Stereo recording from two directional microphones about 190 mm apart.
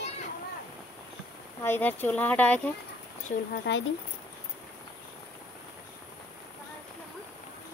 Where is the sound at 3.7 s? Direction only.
65° left (ahead or behind).